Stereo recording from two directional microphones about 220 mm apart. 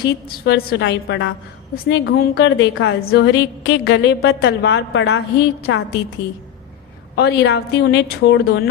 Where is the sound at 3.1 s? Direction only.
50° left (ahead or behind).